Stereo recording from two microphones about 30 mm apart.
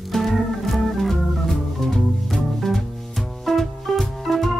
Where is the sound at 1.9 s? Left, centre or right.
Centre.